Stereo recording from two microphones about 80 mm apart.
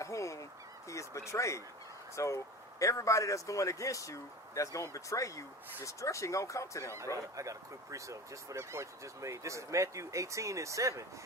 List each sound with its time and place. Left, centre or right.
0.0 s duck: left
0.9 s a man's voice: left
7.3 s speech: right